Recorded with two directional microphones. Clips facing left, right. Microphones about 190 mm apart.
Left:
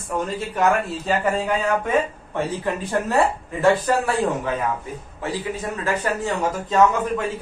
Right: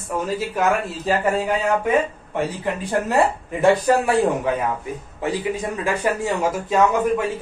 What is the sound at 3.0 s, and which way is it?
Speech, 15° right (ahead or behind).